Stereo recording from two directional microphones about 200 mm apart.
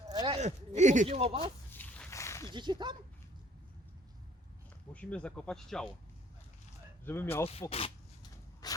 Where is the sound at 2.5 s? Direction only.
20° right (ahead or behind).